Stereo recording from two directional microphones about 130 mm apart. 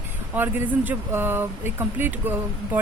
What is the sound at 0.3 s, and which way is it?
A woman's voice, 15° right (ahead or behind).